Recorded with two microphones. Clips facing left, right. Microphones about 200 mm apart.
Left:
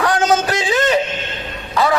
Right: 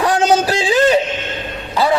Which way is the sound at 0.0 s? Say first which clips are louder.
Right 2 dB; 30° right (ahead or behind).